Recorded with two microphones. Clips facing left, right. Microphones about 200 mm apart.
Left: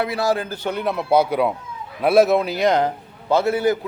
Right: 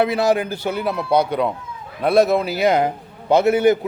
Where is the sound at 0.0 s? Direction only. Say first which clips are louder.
Right 4 dB; 20° right (ahead or behind).